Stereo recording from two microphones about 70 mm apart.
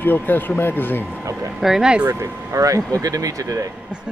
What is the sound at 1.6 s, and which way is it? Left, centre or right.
Speech, centre.